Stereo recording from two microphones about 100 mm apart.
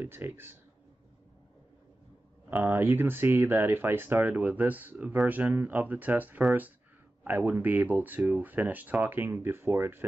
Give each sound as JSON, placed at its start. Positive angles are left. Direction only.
{"t": 0.0, "sound": "speech", "side_deg": -20}
{"t": 2.5, "sound": "speech", "side_deg": -20}